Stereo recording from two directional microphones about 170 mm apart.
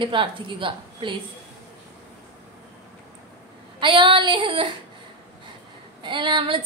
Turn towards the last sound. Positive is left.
turn(degrees=-30)  # may be behind; listen again after turning